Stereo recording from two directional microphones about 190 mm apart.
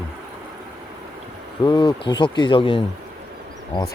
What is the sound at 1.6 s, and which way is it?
Speech, 25° left (ahead or behind).